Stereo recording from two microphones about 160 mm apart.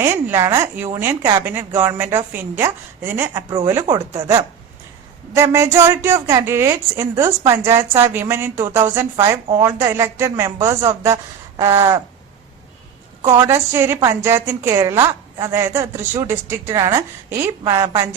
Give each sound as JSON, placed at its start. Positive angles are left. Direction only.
{"t": 0.0, "sound": "a woman's voice", "side_deg": -15}
{"t": 3.3, "sound": "a woman's voice", "side_deg": -30}
{"t": 3.7, "sound": "a woman's voice", "side_deg": -15}
{"t": 13.2, "sound": "a woman's voice", "side_deg": -15}